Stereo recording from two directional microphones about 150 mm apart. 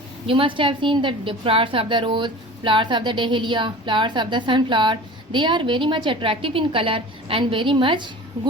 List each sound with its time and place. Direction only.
0.3 s a woman's voice: 35° right (ahead or behind)